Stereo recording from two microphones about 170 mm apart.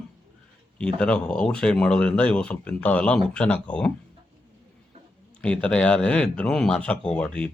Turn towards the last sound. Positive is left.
turn(degrees=5)  # may be behind; listen again after turning